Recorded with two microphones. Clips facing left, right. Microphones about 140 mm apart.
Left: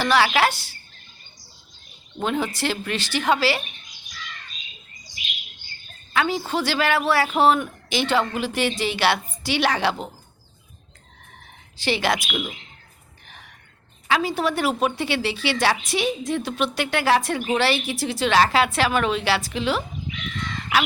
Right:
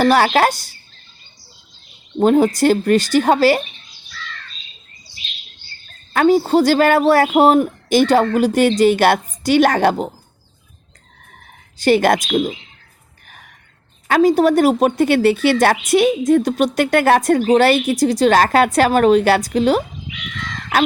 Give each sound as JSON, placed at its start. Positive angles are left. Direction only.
{"t": 0.0, "sound": "a woman's voice", "side_deg": -45}
{"t": 2.1, "sound": "a woman's voice", "side_deg": -40}
{"t": 4.1, "sound": "bird", "side_deg": 15}
{"t": 6.1, "sound": "a woman's voice", "side_deg": -45}
{"t": 11.8, "sound": "a woman's voice", "side_deg": -50}
{"t": 13.2, "sound": "a sound", "side_deg": -45}
{"t": 14.1, "sound": "a woman's voice", "side_deg": -45}